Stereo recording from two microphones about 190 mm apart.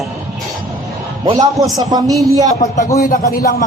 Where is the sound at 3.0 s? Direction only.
45° left (ahead or behind).